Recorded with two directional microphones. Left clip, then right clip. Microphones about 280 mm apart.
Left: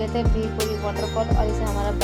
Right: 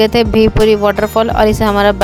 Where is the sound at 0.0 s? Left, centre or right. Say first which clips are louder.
Right 16 dB; right.